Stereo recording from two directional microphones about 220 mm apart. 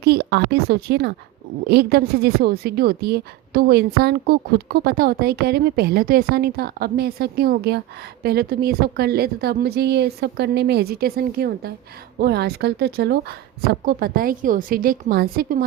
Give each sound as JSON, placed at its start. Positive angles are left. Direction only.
{"t": 0.0, "sound": "a woman's voice", "side_deg": -45}